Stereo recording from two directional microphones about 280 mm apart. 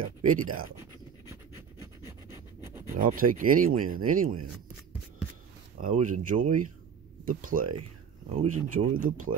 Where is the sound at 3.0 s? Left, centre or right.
Right.